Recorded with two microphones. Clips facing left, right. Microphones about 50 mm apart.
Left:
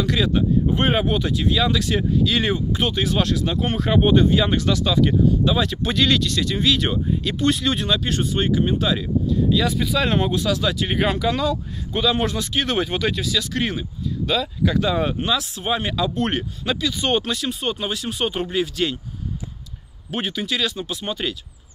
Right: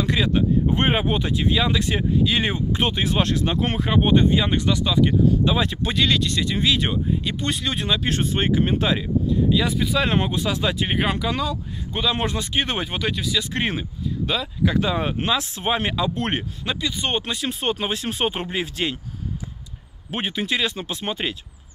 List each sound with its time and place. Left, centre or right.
0.0 s speech: right
3.9 s speech: centre
7.7 s speech: right
8.1 s speech: right
9.0 s speech: centre
13.5 s speech: right
15.1 s speech: right; by 17.2 s centre
17.5 s speech: right
20.1 s speech: right